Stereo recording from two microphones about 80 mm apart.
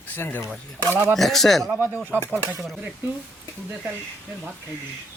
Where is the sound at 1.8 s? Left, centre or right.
Right.